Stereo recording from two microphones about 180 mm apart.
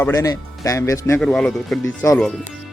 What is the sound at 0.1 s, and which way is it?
Speech, 20° left (ahead or behind).